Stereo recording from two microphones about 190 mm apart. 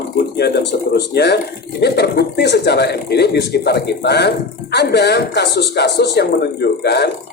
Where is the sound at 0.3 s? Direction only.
60° left (ahead or behind).